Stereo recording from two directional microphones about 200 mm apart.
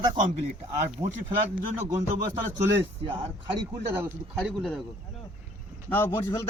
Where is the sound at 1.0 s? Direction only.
30° right (ahead or behind).